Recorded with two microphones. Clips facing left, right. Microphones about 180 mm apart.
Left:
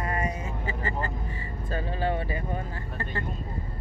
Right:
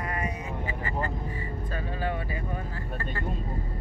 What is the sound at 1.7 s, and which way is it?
Vehicle, 30° left (ahead or behind).